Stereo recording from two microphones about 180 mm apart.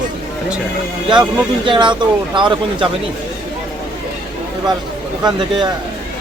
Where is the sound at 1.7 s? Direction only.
25° right (ahead or behind).